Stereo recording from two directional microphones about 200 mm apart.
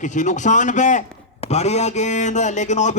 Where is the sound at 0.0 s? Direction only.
40° left (ahead or behind).